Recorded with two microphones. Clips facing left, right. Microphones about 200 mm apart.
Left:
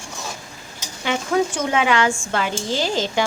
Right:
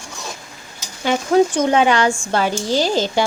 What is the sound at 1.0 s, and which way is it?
A child's voice, 35° right (ahead or behind).